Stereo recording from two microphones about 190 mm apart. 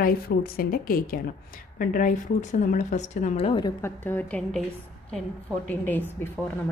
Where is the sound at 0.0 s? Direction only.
55° left (ahead or behind); by 3.7 s 30° left (ahead or behind).